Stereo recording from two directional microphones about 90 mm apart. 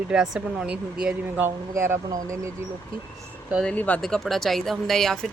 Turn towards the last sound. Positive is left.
turn(degrees=5)  # may be behind; listen again after turning